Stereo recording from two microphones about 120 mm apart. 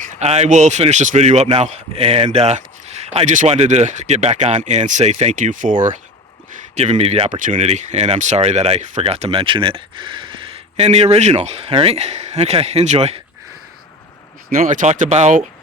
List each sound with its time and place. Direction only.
0.0 s a man's voice: 70° right (ahead or behind); by 6.0 s 90° right
6.7 s speech: 65° right (ahead or behind)
14.7 s speech: 90° right